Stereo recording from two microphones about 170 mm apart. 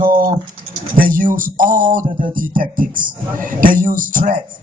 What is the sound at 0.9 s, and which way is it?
A man's voice, 55° right (ahead or behind).